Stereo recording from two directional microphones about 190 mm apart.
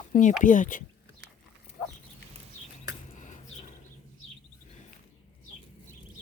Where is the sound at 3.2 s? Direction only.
40° left (ahead or behind).